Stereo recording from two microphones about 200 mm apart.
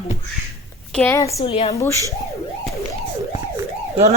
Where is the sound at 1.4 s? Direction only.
30° left (ahead or behind).